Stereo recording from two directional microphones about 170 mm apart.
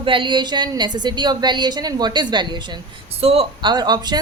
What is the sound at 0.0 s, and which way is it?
A woman's voice, 30° right (ahead or behind).